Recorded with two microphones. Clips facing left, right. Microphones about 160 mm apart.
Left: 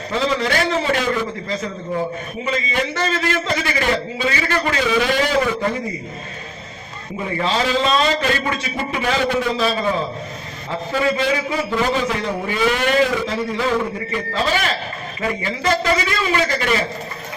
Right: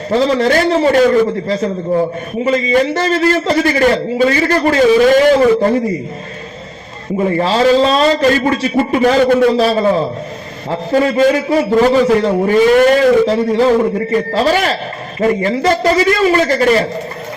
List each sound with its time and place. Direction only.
0.1 s a man's voice: 35° right (ahead or behind)
7.3 s a man's voice: 35° right (ahead or behind)
10.9 s a man's voice: 40° right (ahead or behind)